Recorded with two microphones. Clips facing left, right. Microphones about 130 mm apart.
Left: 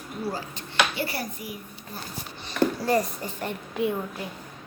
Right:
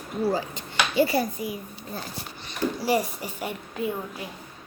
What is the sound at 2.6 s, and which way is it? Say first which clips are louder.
Speech: left 4 dB; 55° left (ahead or behind).